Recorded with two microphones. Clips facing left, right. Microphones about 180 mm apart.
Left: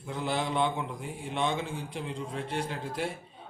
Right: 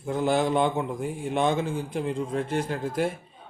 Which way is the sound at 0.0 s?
45° right (ahead or behind).